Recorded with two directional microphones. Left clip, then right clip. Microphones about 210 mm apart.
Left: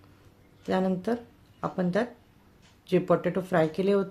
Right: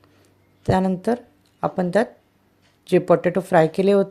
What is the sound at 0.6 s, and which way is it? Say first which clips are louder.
Speech: right 7 dB; 35° right (ahead or behind).